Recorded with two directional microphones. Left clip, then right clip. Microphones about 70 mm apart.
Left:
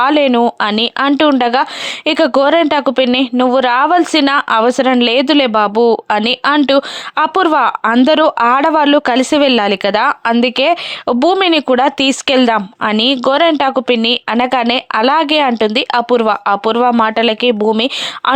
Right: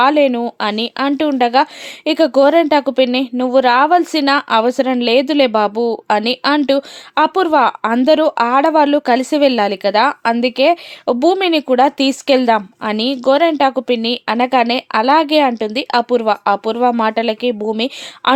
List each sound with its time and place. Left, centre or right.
0.0 s a woman's voice: left